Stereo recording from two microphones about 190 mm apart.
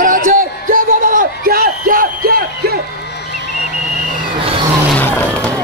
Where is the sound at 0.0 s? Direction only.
45° right (ahead or behind).